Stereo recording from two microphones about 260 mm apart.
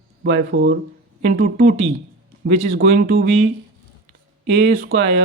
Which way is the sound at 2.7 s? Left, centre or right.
Right.